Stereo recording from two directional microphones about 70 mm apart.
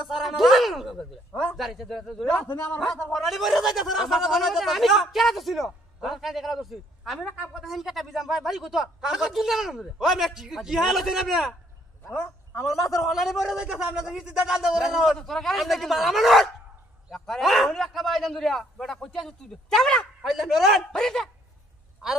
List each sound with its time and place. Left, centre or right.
0.0 s a sound: centre
0.9 s speech: centre
1.6 s speech: centre
2.4 s a man's voice: left
3.1 s speech: centre
12.9 s speech: centre
20.2 s speech: centre